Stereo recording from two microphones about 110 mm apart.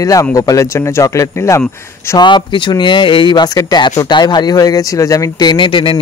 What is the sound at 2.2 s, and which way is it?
Speech, 45° left (ahead or behind).